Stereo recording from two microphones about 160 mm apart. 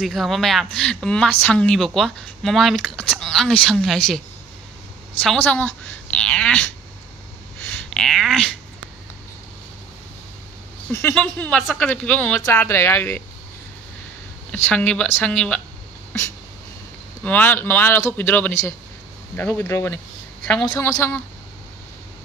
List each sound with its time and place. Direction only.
0.0 s speech: centre (ahead or behind)
5.2 s speech: 5° left (ahead or behind)
7.9 s speech: 5° left (ahead or behind)
10.9 s speech: 15° left (ahead or behind)
14.5 s speech: 10° left (ahead or behind)
17.2 s speech: 10° left (ahead or behind)